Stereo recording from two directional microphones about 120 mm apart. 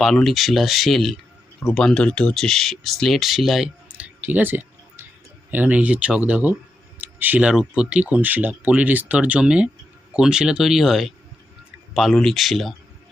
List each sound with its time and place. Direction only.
0.0 s speech: centre (ahead or behind)